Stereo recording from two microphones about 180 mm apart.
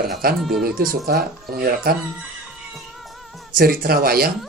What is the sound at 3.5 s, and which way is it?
Speech, 55° right (ahead or behind).